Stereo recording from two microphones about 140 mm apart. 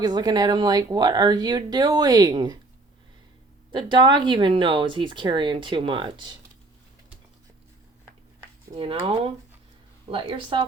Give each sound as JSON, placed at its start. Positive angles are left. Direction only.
{"t": 0.0, "sound": "speech", "side_deg": -30}
{"t": 3.7, "sound": "speech", "side_deg": -35}
{"t": 8.8, "sound": "speech", "side_deg": -40}